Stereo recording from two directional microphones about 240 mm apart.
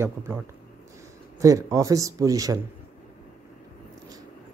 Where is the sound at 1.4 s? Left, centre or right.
Centre.